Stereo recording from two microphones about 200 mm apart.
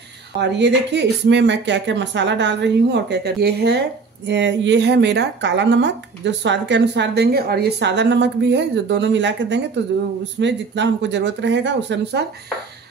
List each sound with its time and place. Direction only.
0.4 s speech: 60° right (ahead or behind)